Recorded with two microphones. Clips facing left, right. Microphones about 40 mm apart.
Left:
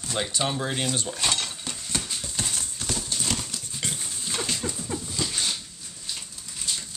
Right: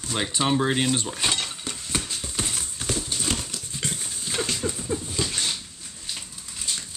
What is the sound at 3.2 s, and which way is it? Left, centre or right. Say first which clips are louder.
Horse: right 1 dB; centre.